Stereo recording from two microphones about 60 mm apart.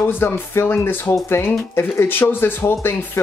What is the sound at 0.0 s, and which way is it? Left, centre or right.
Speech, left.